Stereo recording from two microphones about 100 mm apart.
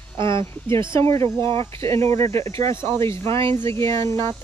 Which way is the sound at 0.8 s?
55° right (ahead or behind).